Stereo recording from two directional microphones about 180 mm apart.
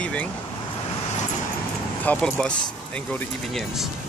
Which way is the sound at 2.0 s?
5° left (ahead or behind).